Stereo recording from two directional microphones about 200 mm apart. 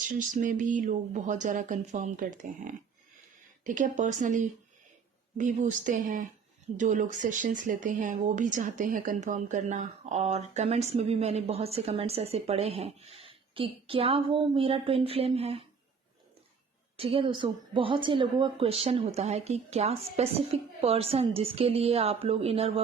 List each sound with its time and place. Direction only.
0.1 s speech: 40° right (ahead or behind)
17.0 s speech: 25° right (ahead or behind)